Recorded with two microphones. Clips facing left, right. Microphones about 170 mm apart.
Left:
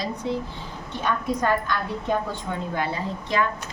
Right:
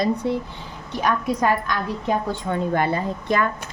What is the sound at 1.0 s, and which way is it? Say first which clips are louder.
A woman's voice: right 3 dB; 80° right.